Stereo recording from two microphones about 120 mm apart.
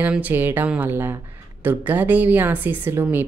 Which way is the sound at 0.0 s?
15° right (ahead or behind).